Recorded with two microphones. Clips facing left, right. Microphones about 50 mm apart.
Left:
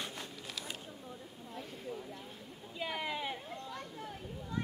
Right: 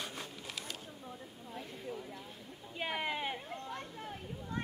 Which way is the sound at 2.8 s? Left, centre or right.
Right.